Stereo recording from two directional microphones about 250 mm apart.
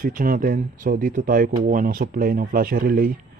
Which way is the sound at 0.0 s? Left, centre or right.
Right.